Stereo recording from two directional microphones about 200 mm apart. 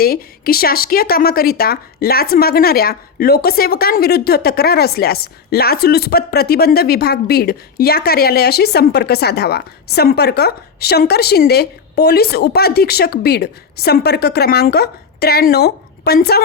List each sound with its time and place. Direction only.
0.0 s speech: 50° left (ahead or behind)